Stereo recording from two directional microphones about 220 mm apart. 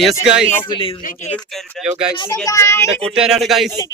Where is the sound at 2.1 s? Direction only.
20° left (ahead or behind); by 3.7 s centre (ahead or behind).